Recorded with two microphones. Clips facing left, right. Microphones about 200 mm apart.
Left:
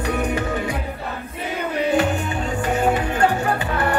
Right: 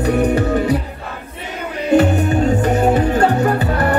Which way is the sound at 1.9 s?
40° right (ahead or behind).